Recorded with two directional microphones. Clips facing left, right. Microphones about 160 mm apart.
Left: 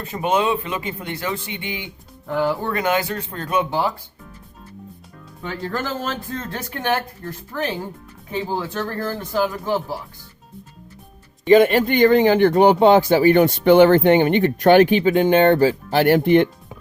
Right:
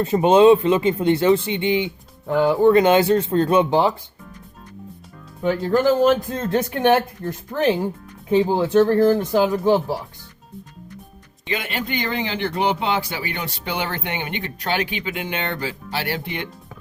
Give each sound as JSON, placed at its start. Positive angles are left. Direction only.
{"t": 0.0, "sound": "speech", "side_deg": -30}
{"t": 5.4, "sound": "speech", "side_deg": -15}
{"t": 11.5, "sound": "a man's voice", "side_deg": 45}